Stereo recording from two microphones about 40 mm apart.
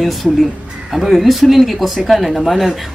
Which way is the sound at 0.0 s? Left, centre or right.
Centre.